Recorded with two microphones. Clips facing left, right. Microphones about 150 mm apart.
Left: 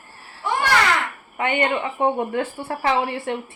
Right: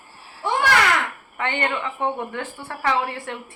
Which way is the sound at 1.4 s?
20° left (ahead or behind).